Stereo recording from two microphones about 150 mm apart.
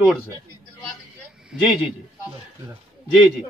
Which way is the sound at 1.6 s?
5° right (ahead or behind).